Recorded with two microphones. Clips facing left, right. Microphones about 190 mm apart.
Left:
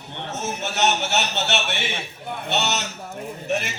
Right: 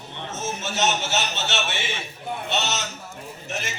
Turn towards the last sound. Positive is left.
turn(degrees=60)  # may be behind; listen again after turning